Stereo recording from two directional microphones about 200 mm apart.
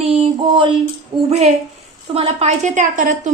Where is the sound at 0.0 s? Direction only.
30° right (ahead or behind).